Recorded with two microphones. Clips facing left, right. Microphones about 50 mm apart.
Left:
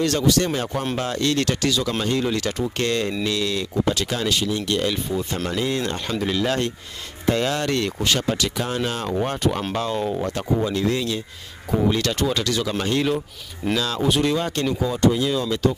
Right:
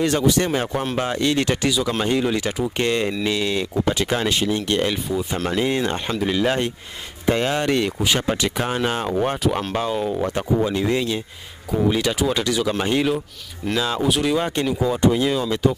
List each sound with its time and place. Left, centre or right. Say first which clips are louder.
0.0 s speech: right 1 dB; centre
8.3 s speech: right 2 dB; right
9.4 s speech: right 1 dB; centre
10.2 s speech: right 2 dB; right
11.9 s speech: right 1 dB; centre
14.0 s speech: left 2 dB; centre
14.3 s speech: right 2 dB; centre